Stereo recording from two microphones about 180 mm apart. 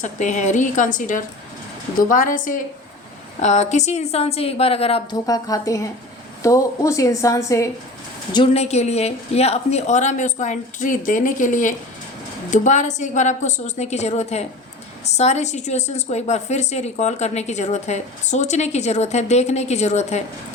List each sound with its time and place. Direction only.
0.0 s a woman's voice: 40° left (ahead or behind)
5.2 s a woman's voice: 20° left (ahead or behind)
8.3 s a woman's voice: 30° left (ahead or behind)